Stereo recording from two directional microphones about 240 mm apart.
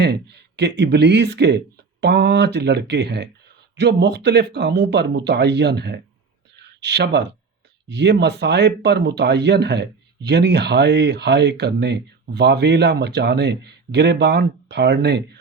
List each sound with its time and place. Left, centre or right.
0.0 s speech: right
6.6 s a sound: right
7.9 s speech: right